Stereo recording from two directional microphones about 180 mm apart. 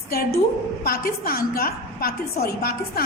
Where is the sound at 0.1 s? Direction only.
60° left (ahead or behind).